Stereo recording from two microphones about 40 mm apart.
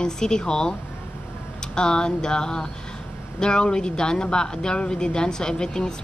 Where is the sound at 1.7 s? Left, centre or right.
Left.